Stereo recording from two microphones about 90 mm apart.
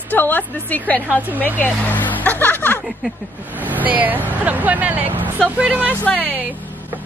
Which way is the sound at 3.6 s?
20° right (ahead or behind).